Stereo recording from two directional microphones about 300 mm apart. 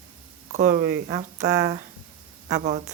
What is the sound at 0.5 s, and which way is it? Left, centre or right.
Speech, right.